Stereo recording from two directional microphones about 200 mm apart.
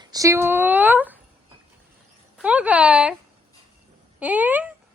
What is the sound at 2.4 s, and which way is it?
Speech, 5° right (ahead or behind).